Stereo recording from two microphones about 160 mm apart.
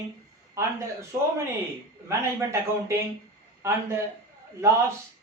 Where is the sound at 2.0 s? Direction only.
20° right (ahead or behind).